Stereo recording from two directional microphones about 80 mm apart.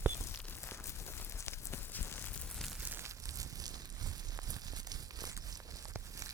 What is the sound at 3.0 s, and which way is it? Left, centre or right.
Crumpling, right.